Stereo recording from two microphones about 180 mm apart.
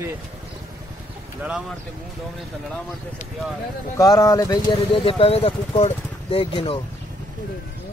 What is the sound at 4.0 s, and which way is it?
Speech, 20° left (ahead or behind).